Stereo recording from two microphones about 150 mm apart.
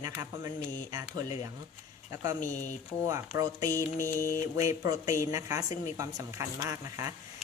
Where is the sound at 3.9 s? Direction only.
15° left (ahead or behind).